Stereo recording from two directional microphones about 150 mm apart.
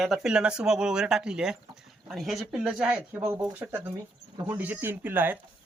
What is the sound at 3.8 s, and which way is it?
Speech, 20° right (ahead or behind).